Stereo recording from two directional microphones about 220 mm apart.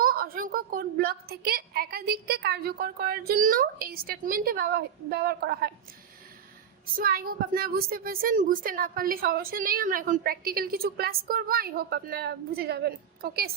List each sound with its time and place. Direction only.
0.0 s a woman's voice: 40° right (ahead or behind)
6.9 s a woman's voice: 40° right (ahead or behind)